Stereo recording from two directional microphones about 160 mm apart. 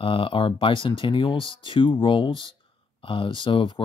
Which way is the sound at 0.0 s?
30° left (ahead or behind).